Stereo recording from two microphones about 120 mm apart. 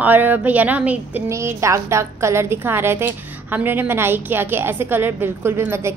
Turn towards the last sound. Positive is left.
turn(degrees=-20)  # may be behind; listen again after turning